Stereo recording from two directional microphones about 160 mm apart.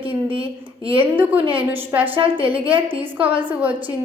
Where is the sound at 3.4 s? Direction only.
10° right (ahead or behind).